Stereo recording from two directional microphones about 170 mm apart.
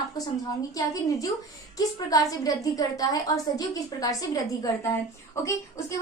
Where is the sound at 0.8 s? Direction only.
20° left (ahead or behind).